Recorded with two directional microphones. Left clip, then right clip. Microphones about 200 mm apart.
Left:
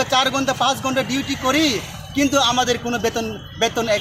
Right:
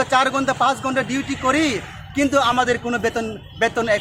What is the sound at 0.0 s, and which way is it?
Speech, centre (ahead or behind).